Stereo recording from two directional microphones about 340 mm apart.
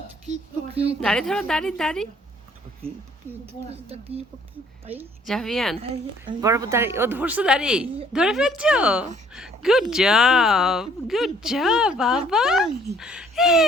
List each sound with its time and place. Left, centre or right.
0.3 s a woman's voice: centre
1.0 s speech: centre
3.3 s a woman's voice: centre
3.7 s a woman's voice: centre
4.9 s a woman's voice: centre